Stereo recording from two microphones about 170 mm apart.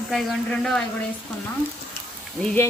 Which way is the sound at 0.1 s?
Centre (ahead or behind).